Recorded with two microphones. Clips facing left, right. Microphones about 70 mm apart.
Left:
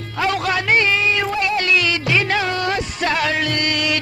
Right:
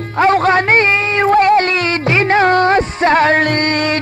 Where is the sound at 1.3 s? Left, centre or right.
Right.